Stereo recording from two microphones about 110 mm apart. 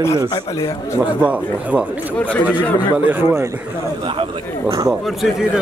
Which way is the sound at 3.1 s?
20° right (ahead or behind).